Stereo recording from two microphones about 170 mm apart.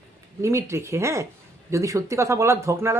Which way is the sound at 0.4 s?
15° right (ahead or behind).